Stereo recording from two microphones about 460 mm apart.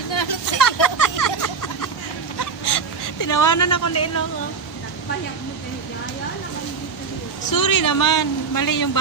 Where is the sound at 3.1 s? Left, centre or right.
Left.